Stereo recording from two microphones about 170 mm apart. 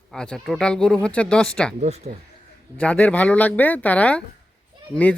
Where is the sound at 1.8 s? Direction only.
40° right (ahead or behind).